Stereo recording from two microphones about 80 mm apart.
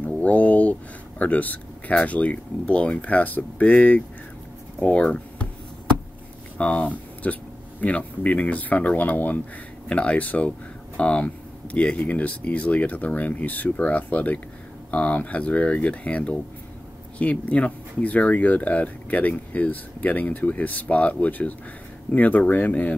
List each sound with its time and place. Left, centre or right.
0.0 s speech: centre
6.6 s speech: centre